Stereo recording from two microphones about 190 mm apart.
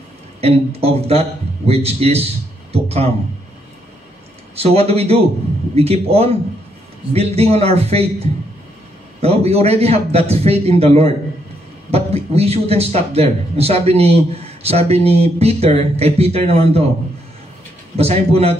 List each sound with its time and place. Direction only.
0.4 s a man's voice: 30° right (ahead or behind)
4.6 s speech: 30° right (ahead or behind)
9.2 s speech: 35° right (ahead or behind)
17.9 s speech: 30° right (ahead or behind)